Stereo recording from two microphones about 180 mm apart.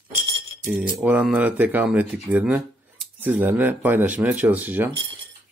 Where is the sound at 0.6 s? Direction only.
10° right (ahead or behind).